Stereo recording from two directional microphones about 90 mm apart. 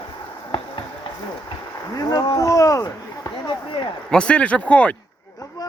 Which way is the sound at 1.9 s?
45° left (ahead or behind).